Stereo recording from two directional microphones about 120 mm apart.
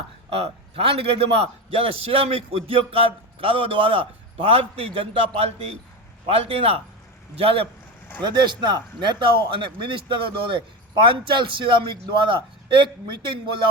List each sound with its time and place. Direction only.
0.3 s a man's voice: 55° right (ahead or behind)
8.2 s a man's voice: 40° right (ahead or behind)